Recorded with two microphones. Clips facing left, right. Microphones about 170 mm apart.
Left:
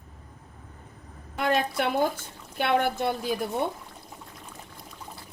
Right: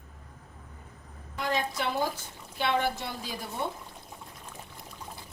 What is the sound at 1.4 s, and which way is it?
Speech, 60° left (ahead or behind).